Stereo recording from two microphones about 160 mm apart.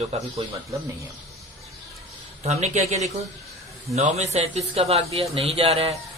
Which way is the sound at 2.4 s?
45° right (ahead or behind).